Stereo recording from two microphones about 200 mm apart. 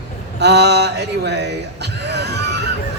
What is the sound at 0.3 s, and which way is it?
A man's voice, 55° right (ahead or behind).